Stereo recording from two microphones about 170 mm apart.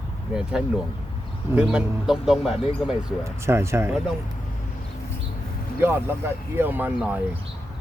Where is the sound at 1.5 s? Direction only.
5° right (ahead or behind).